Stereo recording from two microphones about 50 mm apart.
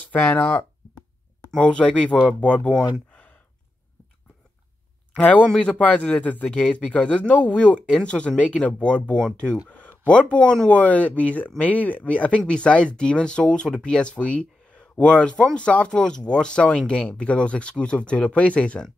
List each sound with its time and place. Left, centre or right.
0.1 s speech: left
3.1 s sigh: left
5.4 s a man's voice: centre
5.8 s a man's voice: left